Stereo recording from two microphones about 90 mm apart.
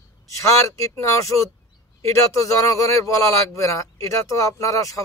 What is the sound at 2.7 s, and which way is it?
A man's voice, 40° left (ahead or behind).